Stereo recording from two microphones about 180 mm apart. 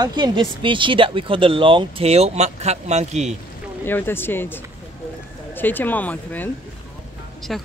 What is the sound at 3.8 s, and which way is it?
Speech, 10° left (ahead or behind).